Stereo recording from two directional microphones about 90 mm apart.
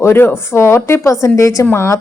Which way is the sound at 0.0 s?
25° left (ahead or behind).